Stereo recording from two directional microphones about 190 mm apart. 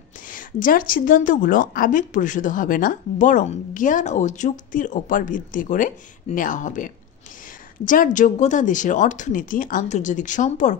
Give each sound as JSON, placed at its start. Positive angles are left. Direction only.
{"t": 0.3, "sound": "a woman's voice", "side_deg": 45}